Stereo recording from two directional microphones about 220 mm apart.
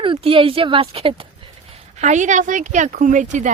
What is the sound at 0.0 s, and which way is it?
A woman's voice, 25° right (ahead or behind).